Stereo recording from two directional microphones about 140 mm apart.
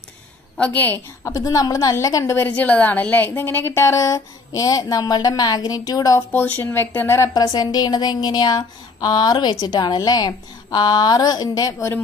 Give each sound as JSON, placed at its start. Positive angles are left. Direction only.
{"t": 0.6, "sound": "a woman's voice", "side_deg": 10}
{"t": 1.3, "sound": "a woman's voice", "side_deg": 25}
{"t": 6.3, "sound": "a woman's voice", "side_deg": 15}